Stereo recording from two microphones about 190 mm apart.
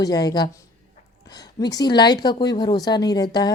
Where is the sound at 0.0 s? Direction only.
20° left (ahead or behind).